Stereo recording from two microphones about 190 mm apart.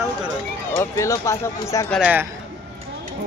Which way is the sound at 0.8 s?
15° left (ahead or behind).